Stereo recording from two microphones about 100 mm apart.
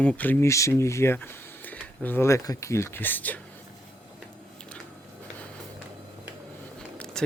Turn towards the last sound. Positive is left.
turn(degrees=10)  # may be behind; listen again after turning